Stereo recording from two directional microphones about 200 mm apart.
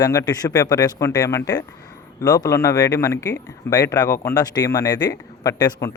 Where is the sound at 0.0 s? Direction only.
20° left (ahead or behind).